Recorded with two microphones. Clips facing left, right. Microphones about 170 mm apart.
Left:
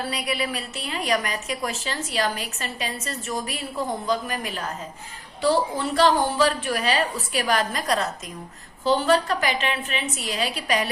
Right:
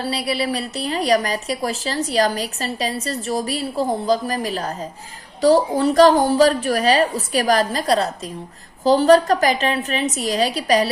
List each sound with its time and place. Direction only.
0.0 s a woman's voice: 30° right (ahead or behind)